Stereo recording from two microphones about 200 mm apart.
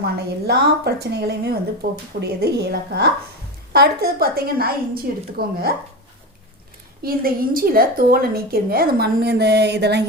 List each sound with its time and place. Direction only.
0.0 s a woman's voice: 55° right (ahead or behind)
7.0 s a woman's voice: 45° right (ahead or behind)